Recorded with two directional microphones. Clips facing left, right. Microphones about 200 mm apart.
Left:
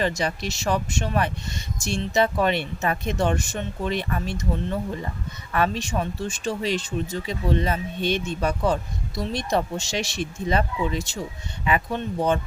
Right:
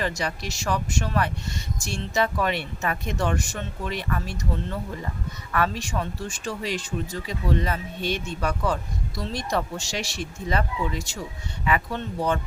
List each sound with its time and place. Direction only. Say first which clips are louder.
0.0 s speech: left 3 dB; 25° left (ahead or behind)